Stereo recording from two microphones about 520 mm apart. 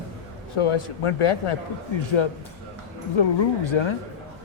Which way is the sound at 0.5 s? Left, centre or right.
Left.